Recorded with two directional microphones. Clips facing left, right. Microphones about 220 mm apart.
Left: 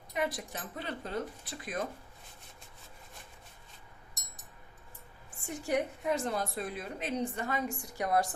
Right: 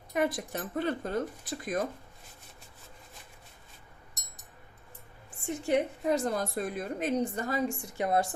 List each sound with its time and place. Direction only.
0.1 s speech: 50° right (ahead or behind)
5.5 s a woman's voice: 25° right (ahead or behind)
6.1 s speech: 40° right (ahead or behind)
7.8 s a woman's voice: 25° right (ahead or behind)